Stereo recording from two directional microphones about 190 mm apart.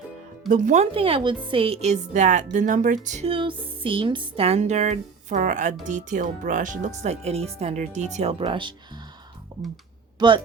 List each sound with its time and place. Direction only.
0.4 s a woman's voice: 40° right (ahead or behind); by 9.0 s 25° right (ahead or behind)
10.2 s speech: 25° right (ahead or behind)